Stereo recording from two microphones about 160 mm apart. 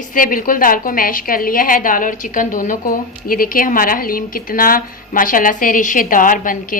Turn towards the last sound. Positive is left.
turn(degrees=60)  # may be behind; listen again after turning